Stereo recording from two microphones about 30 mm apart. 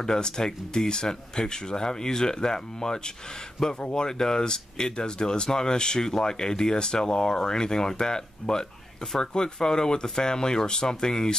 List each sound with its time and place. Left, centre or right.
0.0 s speech: left